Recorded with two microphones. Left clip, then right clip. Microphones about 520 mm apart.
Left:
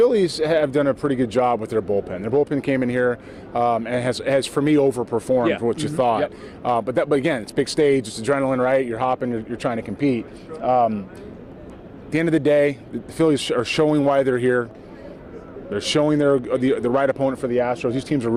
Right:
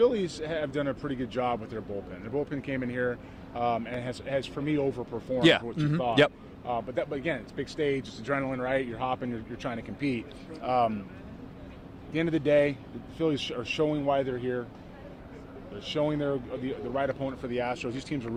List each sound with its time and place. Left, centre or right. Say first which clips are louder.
0.0 s speech: left 9 dB; left
6.7 s speech: left 12 dB; left
12.1 s speech: left 7 dB; left
15.8 s speech: left 10 dB; left